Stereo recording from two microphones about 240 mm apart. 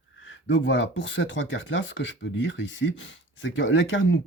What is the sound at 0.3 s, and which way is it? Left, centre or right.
Speech, left.